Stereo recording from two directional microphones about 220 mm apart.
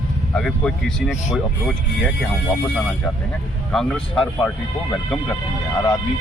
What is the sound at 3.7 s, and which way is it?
Speech, centre (ahead or behind).